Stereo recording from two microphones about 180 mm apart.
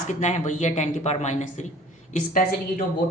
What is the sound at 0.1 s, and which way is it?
A woman's voice, 40° left (ahead or behind).